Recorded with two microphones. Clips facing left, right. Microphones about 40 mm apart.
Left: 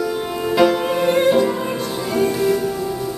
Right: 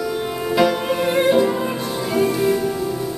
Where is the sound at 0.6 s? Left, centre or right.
Centre.